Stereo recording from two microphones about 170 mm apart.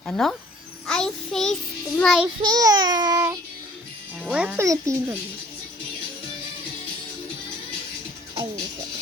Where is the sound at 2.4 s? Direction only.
20° right (ahead or behind).